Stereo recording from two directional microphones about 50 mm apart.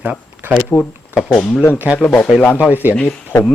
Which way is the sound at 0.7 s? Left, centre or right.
Left.